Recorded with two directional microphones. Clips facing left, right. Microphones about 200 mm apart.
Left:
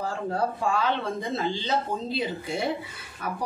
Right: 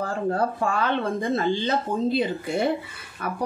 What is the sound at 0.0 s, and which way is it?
Speech, 55° right (ahead or behind).